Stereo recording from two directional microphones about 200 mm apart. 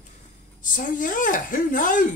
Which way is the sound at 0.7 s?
40° left (ahead or behind).